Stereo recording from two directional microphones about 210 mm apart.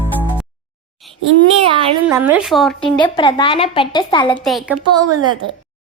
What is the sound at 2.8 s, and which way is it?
A woman's voice, 25° left (ahead or behind).